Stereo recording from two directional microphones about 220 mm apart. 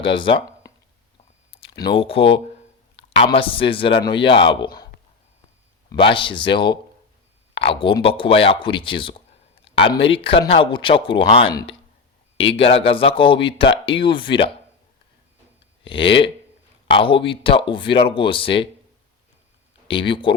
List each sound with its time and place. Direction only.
0.0 s speech: 20° left (ahead or behind)
1.8 s a man's voice: 25° left (ahead or behind)
5.9 s a man's voice: 20° left (ahead or behind)
15.8 s a man's voice: 25° left (ahead or behind)
19.9 s a man's voice: 25° left (ahead or behind)